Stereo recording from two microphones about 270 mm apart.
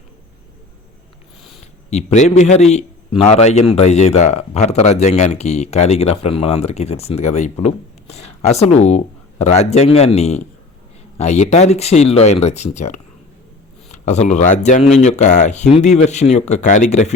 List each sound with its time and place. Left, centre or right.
1.9 s speech: left